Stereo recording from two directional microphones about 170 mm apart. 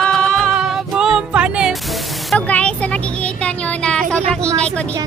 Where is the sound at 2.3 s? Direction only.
10° left (ahead or behind).